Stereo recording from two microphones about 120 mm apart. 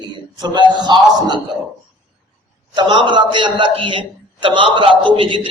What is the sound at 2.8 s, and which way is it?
A man's voice, 40° right (ahead or behind).